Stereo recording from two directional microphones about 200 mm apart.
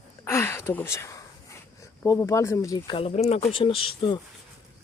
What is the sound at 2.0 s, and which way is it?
Speech, 15° left (ahead or behind).